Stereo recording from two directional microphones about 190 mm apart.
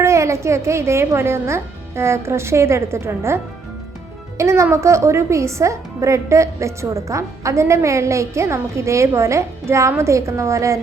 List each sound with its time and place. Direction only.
0.0 s a woman's voice: 15° right (ahead or behind)